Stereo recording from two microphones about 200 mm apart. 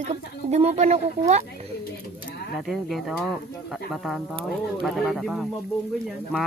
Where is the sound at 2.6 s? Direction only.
Centre (ahead or behind).